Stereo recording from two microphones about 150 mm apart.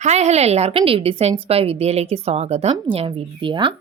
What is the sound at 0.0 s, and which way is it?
A woman's voice, 50° right (ahead or behind).